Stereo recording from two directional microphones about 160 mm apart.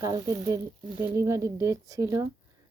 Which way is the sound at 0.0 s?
20° right (ahead or behind).